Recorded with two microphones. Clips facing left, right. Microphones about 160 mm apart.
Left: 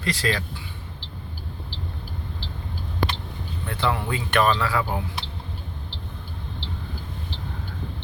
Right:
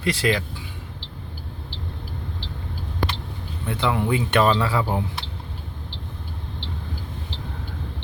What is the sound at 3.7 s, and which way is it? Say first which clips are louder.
Speech: right 3 dB; 20° right (ahead or behind).